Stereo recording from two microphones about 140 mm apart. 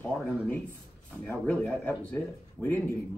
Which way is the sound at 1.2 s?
15° left (ahead or behind).